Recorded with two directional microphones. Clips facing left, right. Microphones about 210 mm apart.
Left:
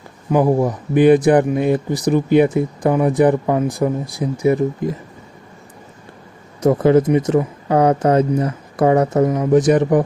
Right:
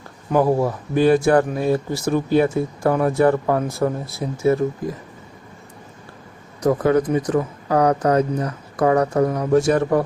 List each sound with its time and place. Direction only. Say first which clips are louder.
0.3 s speech: left 2 dB; 15° left (ahead or behind)
6.6 s speech: left 4 dB; 25° left (ahead or behind)